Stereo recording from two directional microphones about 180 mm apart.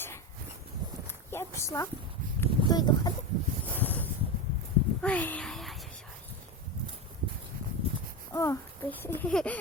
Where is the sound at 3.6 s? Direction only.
10° left (ahead or behind).